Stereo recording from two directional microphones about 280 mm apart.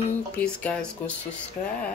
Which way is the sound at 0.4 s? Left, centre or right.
Centre.